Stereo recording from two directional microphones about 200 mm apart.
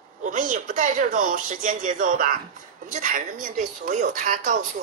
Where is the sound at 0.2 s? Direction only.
40° right (ahead or behind).